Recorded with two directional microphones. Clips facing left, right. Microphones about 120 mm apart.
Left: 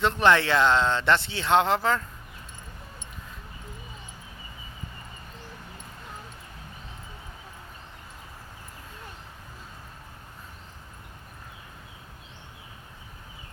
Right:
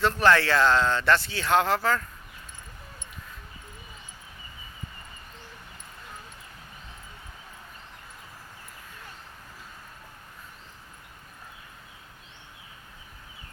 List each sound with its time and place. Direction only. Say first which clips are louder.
0.0 s speech: even; 20° left (ahead or behind)